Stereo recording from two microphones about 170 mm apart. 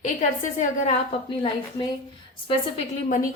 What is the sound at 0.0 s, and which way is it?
Speech, 45° left (ahead or behind).